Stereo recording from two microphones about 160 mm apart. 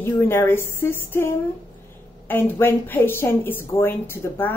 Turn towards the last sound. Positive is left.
turn(degrees=10)  # may be behind; listen again after turning